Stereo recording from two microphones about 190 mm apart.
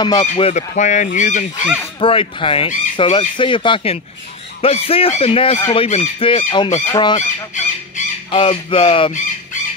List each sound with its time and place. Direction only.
0.0 s speech: 25° left (ahead or behind)
0.5 s speech: 40° left (ahead or behind)
2.0 s speech: 30° left (ahead or behind)
7.2 s speech: 40° left (ahead or behind)
8.3 s speech: 30° left (ahead or behind)